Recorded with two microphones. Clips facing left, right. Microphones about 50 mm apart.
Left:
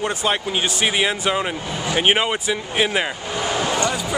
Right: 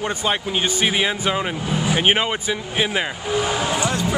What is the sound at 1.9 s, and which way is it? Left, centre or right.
Speech, centre.